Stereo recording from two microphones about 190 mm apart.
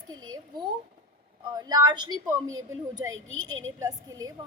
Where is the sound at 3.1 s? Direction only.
90° right.